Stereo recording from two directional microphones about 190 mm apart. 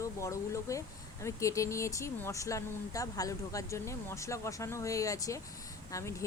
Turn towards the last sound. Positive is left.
turn(degrees=15)  # may be behind; listen again after turning